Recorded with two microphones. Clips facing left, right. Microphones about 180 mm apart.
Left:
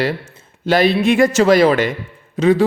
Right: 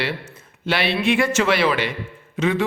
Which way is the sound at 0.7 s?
40° left (ahead or behind).